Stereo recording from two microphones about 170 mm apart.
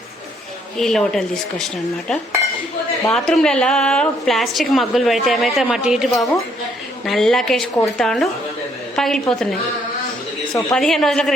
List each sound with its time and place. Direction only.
0.8 s a woman's voice: centre (ahead or behind)
2.3 s cutlery: 15° right (ahead or behind)
3.1 s a woman's voice: 5° left (ahead or behind)